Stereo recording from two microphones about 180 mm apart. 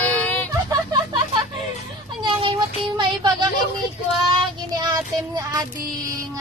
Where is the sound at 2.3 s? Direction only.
25° right (ahead or behind).